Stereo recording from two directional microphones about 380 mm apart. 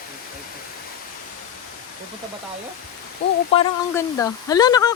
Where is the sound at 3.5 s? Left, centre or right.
Centre.